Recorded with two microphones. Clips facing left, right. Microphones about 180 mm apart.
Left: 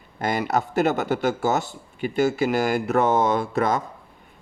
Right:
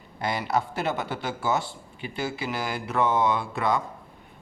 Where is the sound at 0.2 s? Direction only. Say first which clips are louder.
Left 3 dB; 45° left (ahead or behind).